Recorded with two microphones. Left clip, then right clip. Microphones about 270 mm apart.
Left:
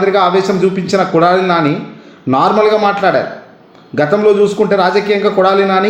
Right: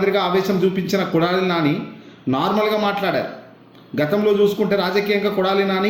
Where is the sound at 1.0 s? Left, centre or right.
Left.